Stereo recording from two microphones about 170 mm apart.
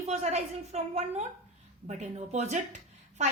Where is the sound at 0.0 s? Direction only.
40° right (ahead or behind).